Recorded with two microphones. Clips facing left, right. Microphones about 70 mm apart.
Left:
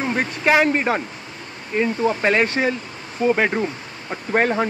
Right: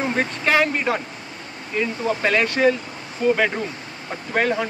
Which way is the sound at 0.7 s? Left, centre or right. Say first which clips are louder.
Left 2 dB; left.